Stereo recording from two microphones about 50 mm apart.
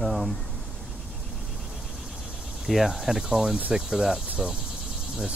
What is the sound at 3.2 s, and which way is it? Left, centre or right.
Speech, centre.